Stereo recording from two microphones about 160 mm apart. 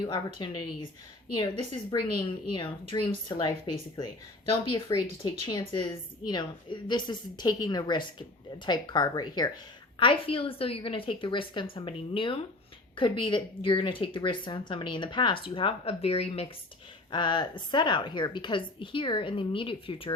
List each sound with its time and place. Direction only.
0.0 s a woman's voice: 30° left (ahead or behind)